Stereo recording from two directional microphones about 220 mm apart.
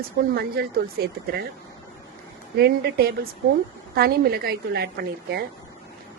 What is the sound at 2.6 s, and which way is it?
Speech, 45° right (ahead or behind).